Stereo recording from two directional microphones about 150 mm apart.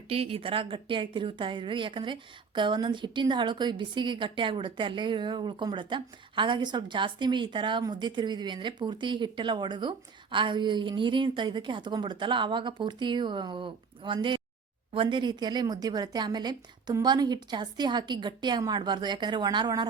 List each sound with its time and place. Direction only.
0.1 s a woman's voice: 40° right (ahead or behind)